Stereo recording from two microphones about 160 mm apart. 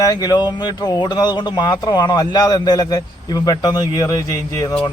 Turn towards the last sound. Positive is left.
turn(degrees=20)  # may be behind; listen again after turning